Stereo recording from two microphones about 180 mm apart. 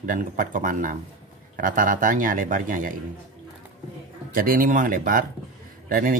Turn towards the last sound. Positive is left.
turn(degrees=-50)  # may be behind; listen again after turning